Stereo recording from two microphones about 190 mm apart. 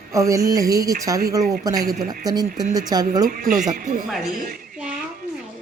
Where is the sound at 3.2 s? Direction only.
50° right (ahead or behind).